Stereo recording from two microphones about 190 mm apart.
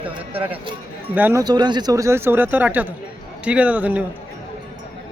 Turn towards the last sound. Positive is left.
turn(degrees=-10)  # may be behind; listen again after turning